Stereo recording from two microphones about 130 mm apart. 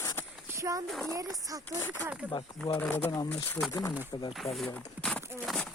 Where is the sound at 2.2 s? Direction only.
10° right (ahead or behind).